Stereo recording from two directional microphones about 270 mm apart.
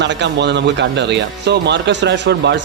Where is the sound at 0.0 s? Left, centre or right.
Right.